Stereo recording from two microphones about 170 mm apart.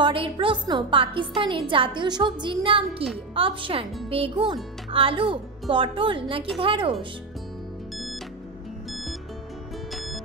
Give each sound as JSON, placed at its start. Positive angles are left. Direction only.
{"t": 0.0, "sound": "a woman's voice", "side_deg": -30}
{"t": 9.9, "sound": "music", "side_deg": 0}